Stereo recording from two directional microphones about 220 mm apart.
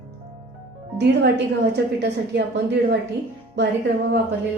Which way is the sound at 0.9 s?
50° right (ahead or behind).